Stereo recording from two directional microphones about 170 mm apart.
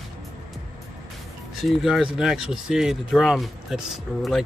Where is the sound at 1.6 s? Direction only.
Centre (ahead or behind).